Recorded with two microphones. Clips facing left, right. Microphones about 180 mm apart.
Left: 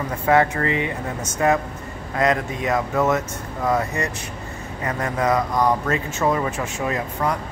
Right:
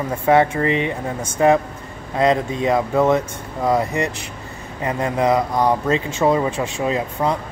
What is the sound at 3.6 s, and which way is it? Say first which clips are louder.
A man's voice: right 3 dB; 15° right (ahead or behind).